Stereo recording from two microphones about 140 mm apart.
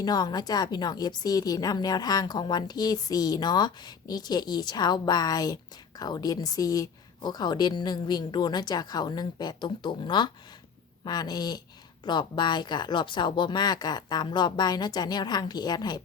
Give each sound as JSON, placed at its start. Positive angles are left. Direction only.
{"t": 0.0, "sound": "a woman's voice", "side_deg": 30}